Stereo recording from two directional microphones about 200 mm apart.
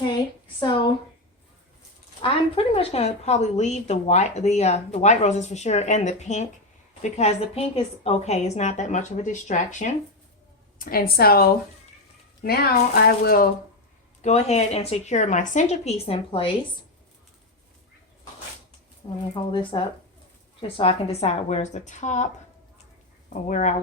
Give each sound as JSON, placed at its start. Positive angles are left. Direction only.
{"t": 0.6, "sound": "a sound", "side_deg": 25}
{"t": 2.2, "sound": "a woman's voice", "side_deg": 25}
{"t": 14.2, "sound": "a woman's voice", "side_deg": 35}
{"t": 19.3, "sound": "a woman's voice", "side_deg": 25}
{"t": 23.3, "sound": "a woman's voice", "side_deg": 40}